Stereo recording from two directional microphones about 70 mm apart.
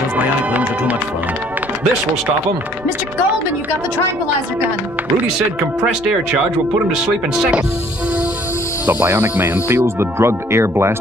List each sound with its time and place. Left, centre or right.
0.5 s speech: right
8.8 s speech: right